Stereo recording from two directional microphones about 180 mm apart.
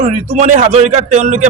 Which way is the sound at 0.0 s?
40° right (ahead or behind).